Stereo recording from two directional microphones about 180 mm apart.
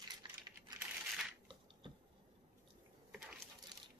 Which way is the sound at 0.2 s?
25° right (ahead or behind).